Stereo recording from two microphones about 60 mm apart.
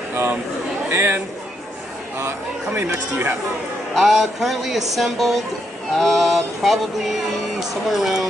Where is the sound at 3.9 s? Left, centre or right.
Centre.